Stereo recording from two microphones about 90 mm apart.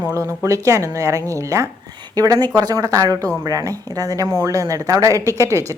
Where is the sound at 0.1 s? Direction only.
35° right (ahead or behind).